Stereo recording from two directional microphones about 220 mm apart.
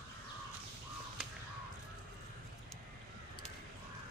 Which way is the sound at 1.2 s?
5° right (ahead or behind).